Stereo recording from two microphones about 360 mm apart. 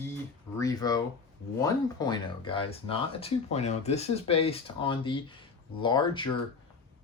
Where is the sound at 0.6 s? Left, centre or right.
Centre.